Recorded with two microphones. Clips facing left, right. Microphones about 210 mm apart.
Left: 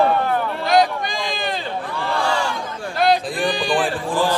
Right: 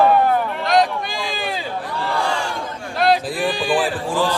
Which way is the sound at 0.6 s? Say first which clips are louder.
Left 3 dB; centre (ahead or behind).